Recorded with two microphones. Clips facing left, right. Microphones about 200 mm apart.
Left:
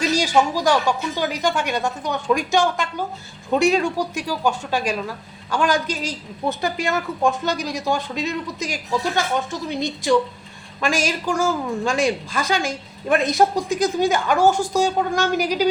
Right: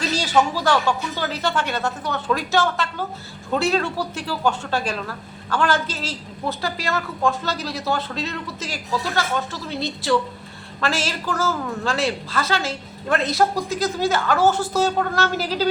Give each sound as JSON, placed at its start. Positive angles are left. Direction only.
{"t": 0.0, "sound": "speech", "side_deg": 10}